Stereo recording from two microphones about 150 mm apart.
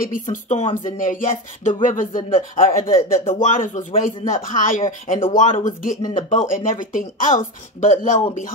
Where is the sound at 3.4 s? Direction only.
55° left (ahead or behind).